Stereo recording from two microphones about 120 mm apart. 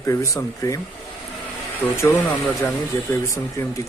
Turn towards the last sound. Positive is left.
turn(degrees=25)  # may be behind; listen again after turning